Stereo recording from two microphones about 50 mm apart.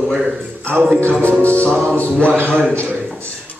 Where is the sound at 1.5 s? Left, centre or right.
Left.